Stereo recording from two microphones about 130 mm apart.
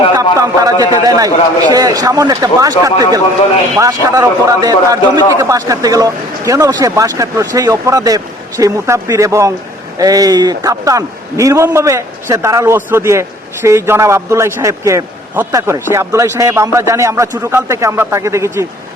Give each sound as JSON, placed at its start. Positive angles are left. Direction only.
{"t": 0.2, "sound": "a man's voice", "side_deg": -25}